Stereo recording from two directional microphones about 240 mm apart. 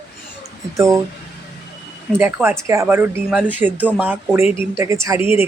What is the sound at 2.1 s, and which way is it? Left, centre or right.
Speech, centre.